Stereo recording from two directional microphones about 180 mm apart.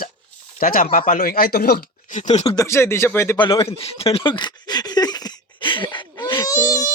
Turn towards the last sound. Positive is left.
turn(degrees=20)  # may be behind; listen again after turning